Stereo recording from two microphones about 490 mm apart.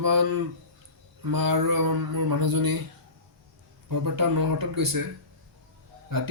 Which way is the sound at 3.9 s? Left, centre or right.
Right.